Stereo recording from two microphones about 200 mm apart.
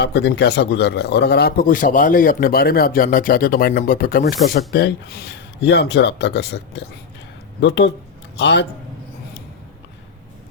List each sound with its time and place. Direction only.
0.0 s a man's voice: 55° left (ahead or behind)